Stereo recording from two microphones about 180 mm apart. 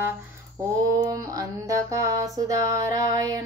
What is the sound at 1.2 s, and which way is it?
Music, 20° right (ahead or behind).